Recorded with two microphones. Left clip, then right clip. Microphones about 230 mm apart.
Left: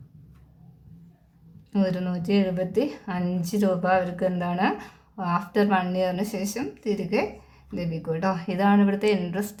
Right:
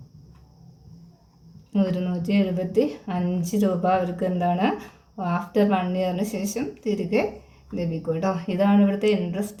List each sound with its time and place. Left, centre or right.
2.0 s speech: left